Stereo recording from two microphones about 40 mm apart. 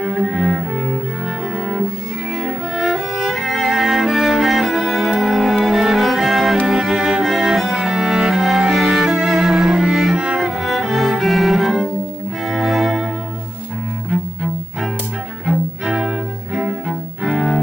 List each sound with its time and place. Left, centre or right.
0.0 s cello: centre
0.3 s cello: centre
2.4 s music: centre
7.6 s cello: centre
10.1 s cello: right
10.4 s cello: centre
12.4 s music: centre
16.0 s cello: centre